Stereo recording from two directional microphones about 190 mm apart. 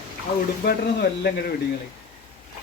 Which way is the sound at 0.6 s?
55° left (ahead or behind).